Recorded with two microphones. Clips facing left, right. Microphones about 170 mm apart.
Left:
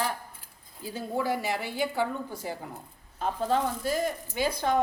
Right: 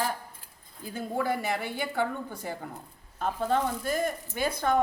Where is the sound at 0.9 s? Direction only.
55° right (ahead or behind).